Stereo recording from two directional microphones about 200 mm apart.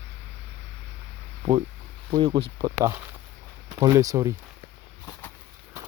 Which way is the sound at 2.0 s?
25° right (ahead or behind).